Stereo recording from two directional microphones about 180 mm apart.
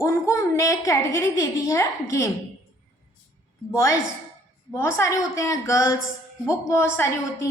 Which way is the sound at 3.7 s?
15° left (ahead or behind).